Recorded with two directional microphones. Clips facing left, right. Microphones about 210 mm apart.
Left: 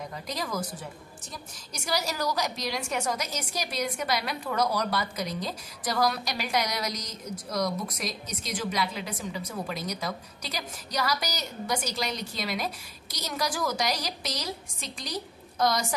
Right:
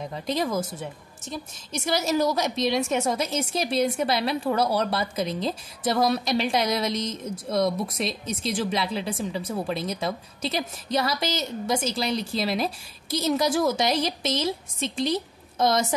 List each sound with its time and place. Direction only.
0.1 s a woman's voice: 25° right (ahead or behind)